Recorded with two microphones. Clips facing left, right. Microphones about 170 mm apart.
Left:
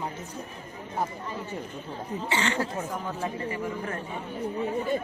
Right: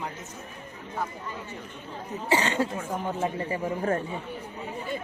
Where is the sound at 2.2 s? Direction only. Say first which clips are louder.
Right 4 dB; 35° right (ahead or behind).